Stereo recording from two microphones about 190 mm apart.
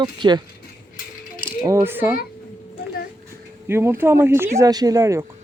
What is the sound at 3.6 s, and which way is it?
Speech, 15° right (ahead or behind).